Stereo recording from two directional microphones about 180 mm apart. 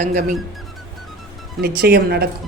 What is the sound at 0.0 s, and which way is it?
Speech, 45° right (ahead or behind).